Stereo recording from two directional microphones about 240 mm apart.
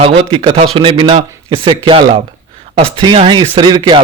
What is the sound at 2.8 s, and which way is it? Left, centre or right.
A man's voice, right.